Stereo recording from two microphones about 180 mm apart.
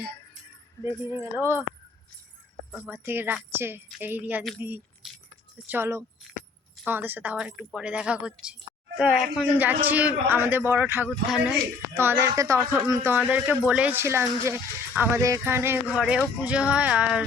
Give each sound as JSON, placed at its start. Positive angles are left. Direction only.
{"t": 0.9, "sound": "speech", "side_deg": 25}
{"t": 1.2, "sound": "speech", "side_deg": -15}
{"t": 2.8, "sound": "speech", "side_deg": -10}
{"t": 5.0, "sound": "keys jangling", "side_deg": 0}
{"t": 5.6, "sound": "speech", "side_deg": -15}
{"t": 11.9, "sound": "speech", "side_deg": -15}